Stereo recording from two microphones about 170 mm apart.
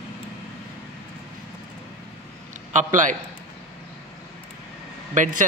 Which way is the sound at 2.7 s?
45° right (ahead or behind).